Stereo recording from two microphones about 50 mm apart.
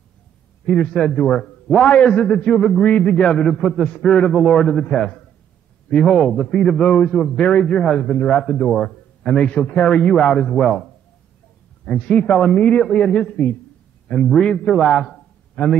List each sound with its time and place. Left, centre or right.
0.7 s a man's voice: centre
1.4 s a man's voice: centre
1.9 s a man's voice: left
11.8 s a man's voice: centre